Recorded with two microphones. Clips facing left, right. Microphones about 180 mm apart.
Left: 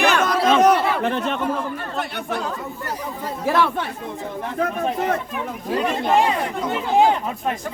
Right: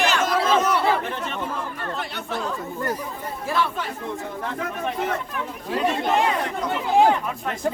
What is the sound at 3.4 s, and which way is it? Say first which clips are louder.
Speech: left 5 dB; 70° left (ahead or behind).